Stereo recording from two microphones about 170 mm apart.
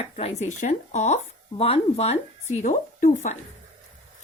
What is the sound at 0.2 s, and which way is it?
A woman's voice, 40° left (ahead or behind).